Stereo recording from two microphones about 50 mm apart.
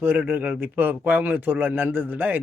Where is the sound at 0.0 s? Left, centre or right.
Right.